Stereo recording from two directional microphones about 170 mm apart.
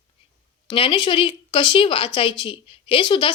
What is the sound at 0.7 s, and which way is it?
A woman's voice, 30° left (ahead or behind).